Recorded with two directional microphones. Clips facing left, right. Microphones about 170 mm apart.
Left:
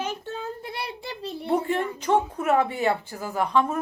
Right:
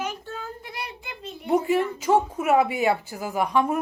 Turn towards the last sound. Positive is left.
turn(degrees=-15)  # may be behind; listen again after turning